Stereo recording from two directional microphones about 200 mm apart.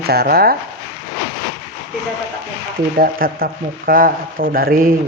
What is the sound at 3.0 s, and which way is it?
Speech, 45° right (ahead or behind).